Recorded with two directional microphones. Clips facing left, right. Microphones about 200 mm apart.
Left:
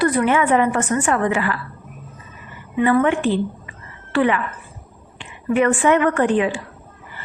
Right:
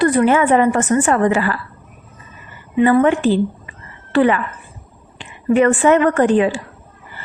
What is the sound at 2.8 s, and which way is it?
A woman's voice, 35° right (ahead or behind).